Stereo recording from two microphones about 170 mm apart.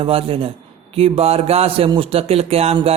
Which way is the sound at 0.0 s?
35° right (ahead or behind).